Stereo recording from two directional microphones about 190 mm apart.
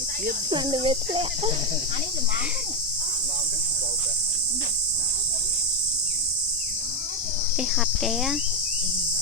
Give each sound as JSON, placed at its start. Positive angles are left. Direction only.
{"t": 0.5, "sound": "speech", "side_deg": -25}
{"t": 7.6, "sound": "insect", "side_deg": 0}